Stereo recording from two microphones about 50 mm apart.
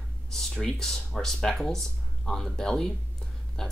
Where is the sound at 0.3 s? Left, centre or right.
Centre.